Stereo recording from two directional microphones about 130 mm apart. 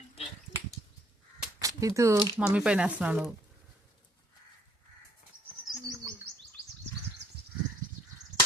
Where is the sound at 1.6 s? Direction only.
25° right (ahead or behind).